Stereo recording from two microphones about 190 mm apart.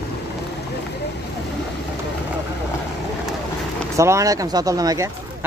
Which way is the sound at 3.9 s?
15° right (ahead or behind).